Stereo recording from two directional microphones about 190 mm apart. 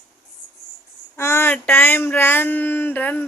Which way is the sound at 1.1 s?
15° left (ahead or behind).